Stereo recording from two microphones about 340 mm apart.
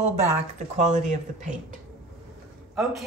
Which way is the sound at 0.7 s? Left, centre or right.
Right.